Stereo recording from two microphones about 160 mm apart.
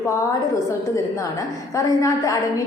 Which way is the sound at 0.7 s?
20° left (ahead or behind).